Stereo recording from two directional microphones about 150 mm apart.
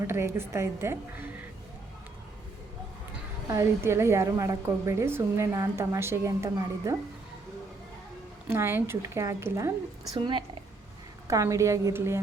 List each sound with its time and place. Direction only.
0.0 s a woman's voice: 15° right (ahead or behind)
3.5 s a woman's voice: 20° right (ahead or behind)
8.4 s a woman's voice: 15° right (ahead or behind)
10.2 s a woman's voice: 35° right (ahead or behind)
11.3 s a woman's voice: 20° right (ahead or behind)